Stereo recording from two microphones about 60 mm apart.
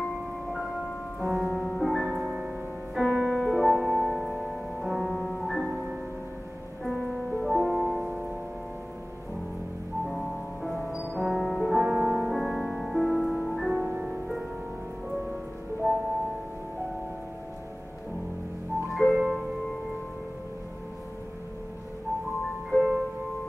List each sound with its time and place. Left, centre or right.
1.2 s music: centre
1.5 s music: centre
1.8 s music: centre
5.0 s music: centre
5.4 s music: centre
10.0 s music: centre
11.3 s music: centre
11.7 s music: centre
18.9 s music: centre
22.7 s music: centre